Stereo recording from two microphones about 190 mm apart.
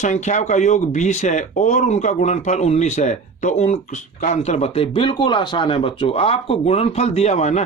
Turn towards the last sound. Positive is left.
turn(degrees=35)  # may be behind; listen again after turning